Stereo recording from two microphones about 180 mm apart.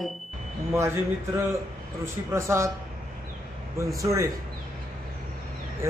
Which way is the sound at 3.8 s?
15° right (ahead or behind).